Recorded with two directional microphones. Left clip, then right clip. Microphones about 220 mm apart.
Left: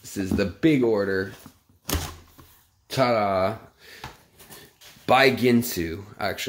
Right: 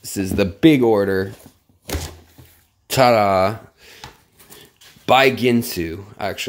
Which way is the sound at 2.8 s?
35° right (ahead or behind).